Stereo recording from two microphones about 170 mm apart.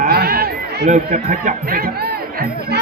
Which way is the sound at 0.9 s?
45° right (ahead or behind).